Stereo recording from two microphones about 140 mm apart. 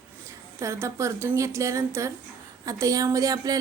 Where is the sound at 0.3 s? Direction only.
20° right (ahead or behind).